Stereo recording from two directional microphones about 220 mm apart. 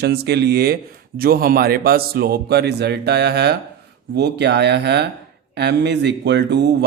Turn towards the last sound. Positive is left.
turn(degrees=-50)  # may be behind; listen again after turning